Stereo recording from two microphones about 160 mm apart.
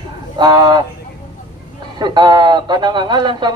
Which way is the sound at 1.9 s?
25° right (ahead or behind).